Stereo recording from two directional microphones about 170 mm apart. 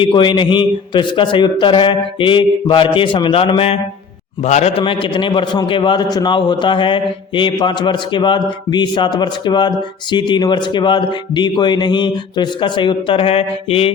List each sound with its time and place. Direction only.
0.0 s a man's voice: 30° left (ahead or behind)